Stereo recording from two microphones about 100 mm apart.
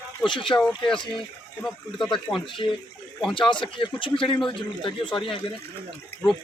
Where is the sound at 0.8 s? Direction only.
55° left (ahead or behind).